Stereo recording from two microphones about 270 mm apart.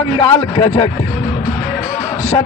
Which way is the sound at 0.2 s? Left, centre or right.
Centre.